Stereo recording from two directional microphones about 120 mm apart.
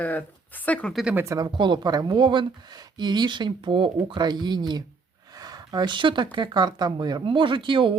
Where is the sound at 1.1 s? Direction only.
25° right (ahead or behind).